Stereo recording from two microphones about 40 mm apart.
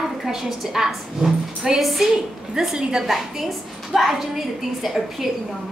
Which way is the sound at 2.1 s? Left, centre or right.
Centre.